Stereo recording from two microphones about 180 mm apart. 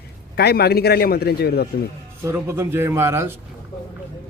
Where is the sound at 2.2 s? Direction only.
15° right (ahead or behind).